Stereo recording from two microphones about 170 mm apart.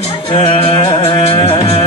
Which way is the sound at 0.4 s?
35° left (ahead or behind).